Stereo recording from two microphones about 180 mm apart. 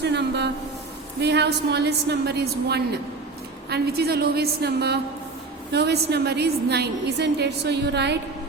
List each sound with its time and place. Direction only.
0.0 s a woman's voice: 70° right (ahead or behind)